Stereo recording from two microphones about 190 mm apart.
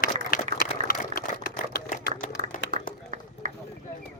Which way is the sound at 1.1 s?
50° left (ahead or behind).